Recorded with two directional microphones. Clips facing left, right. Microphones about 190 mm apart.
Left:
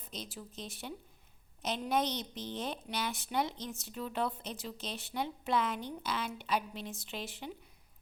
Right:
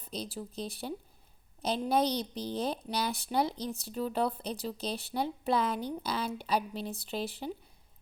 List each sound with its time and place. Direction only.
0.0 s a woman's voice: 35° right (ahead or behind)